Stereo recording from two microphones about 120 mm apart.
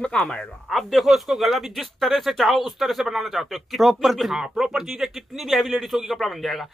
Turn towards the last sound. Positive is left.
turn(degrees=0)  # may be behind; listen again after turning